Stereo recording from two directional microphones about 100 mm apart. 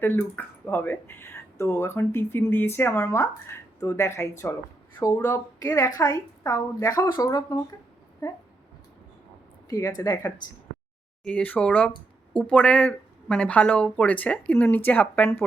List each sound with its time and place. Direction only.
0.0 s speech: 20° left (ahead or behind)
5.6 s a woman's voice: 35° left (ahead or behind)
8.2 s speech: 25° left (ahead or behind)
9.6 s a woman's voice: 35° left (ahead or behind)
11.3 s speech: 15° left (ahead or behind)